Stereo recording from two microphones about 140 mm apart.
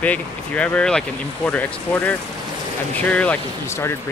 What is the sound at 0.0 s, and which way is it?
Speech, 10° left (ahead or behind).